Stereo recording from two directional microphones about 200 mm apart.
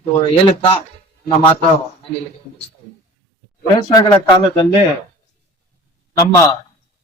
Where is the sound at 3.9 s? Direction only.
20° left (ahead or behind).